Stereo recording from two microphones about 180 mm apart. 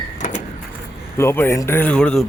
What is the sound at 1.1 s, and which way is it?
Speech, 15° left (ahead or behind).